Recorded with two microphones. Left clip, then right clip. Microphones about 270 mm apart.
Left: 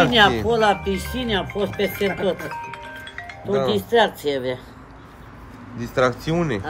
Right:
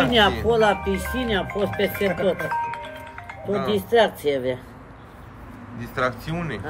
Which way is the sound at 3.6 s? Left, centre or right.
Centre.